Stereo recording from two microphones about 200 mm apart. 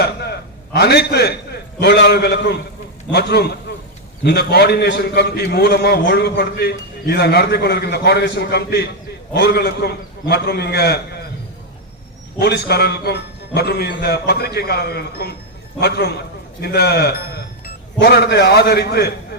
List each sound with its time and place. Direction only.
0.0 s a sound: 55° left (ahead or behind)
1.8 s a man's voice: 55° left (ahead or behind)
12.4 s a man's voice: 55° left (ahead or behind)